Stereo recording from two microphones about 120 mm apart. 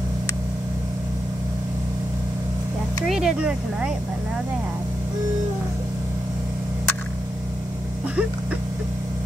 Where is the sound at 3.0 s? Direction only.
5° right (ahead or behind).